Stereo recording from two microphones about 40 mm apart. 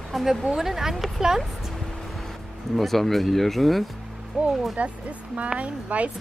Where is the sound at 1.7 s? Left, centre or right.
Centre.